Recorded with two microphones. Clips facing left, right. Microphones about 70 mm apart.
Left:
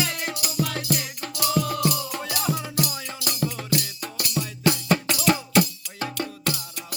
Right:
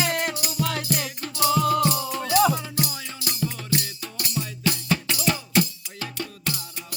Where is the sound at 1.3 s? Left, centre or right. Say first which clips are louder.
Right 4 dB; right.